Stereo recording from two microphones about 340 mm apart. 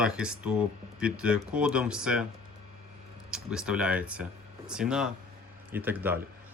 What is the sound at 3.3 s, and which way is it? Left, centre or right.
Speech, centre.